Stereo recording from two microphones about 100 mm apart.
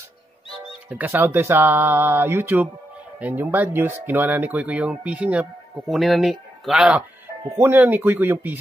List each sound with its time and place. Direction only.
0.8 s speech: 20° right (ahead or behind)
5.9 s speech: centre (ahead or behind)
7.4 s speech: 25° right (ahead or behind)